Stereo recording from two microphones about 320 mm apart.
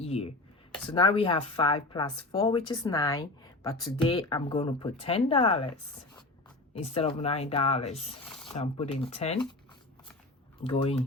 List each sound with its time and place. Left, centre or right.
0.0 s a sound: centre
0.7 s speech: centre
6.7 s speech: centre
8.3 s a sound: centre
8.5 s speech: centre
10.6 s speech: centre